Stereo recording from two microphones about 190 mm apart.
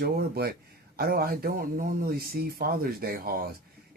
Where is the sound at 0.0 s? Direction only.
55° right (ahead or behind).